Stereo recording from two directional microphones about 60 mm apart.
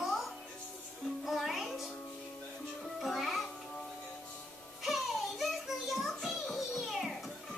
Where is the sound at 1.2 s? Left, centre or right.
Centre.